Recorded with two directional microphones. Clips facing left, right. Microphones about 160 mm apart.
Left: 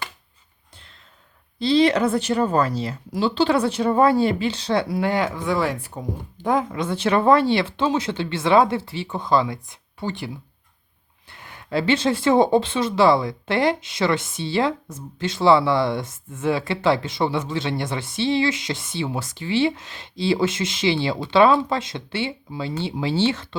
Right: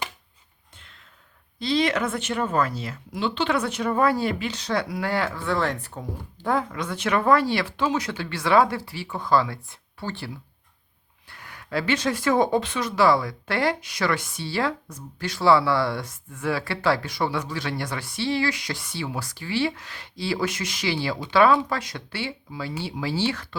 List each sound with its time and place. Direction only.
1.5 s speech: 30° left (ahead or behind)